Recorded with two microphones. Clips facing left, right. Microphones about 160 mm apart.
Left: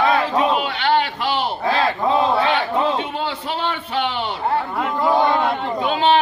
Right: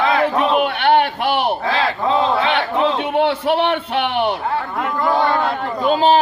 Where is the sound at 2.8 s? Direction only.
65° right (ahead or behind).